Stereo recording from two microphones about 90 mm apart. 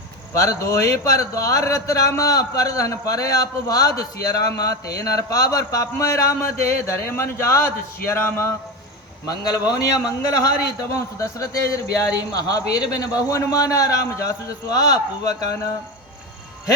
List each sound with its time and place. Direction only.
0.3 s a man's voice: 35° left (ahead or behind)
9.2 s a man's voice: 45° left (ahead or behind)